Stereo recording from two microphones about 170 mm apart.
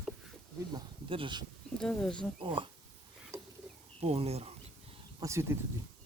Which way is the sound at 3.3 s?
15° right (ahead or behind).